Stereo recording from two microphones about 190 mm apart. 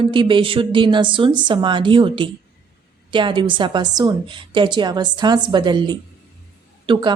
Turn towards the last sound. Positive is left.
turn(degrees=-25)  # may be behind; listen again after turning